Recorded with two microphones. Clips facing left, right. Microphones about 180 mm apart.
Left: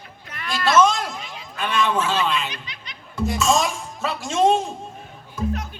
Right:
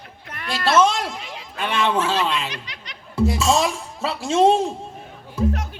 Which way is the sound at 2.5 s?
75° right (ahead or behind).